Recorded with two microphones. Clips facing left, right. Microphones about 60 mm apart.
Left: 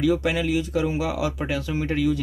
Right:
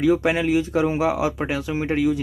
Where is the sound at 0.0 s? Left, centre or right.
Right.